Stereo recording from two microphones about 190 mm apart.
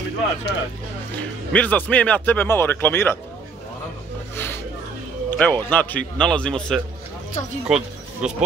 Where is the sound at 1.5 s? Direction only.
5° left (ahead or behind).